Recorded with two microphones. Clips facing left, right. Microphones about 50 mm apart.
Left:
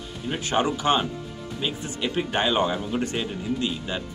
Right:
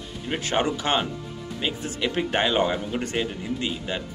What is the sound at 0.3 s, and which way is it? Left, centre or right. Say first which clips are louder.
Speech: even; right.